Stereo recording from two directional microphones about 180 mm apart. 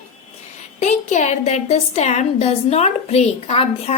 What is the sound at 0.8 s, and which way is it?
A woman's voice, 40° left (ahead or behind).